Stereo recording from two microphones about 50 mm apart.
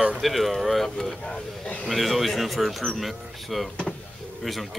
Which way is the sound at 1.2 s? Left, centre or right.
Centre.